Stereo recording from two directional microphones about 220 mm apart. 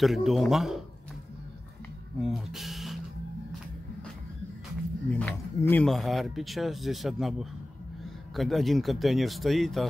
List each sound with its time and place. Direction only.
0.0 s speech: centre (ahead or behind)
2.1 s speech: centre (ahead or behind)
5.1 s speech: 10° left (ahead or behind)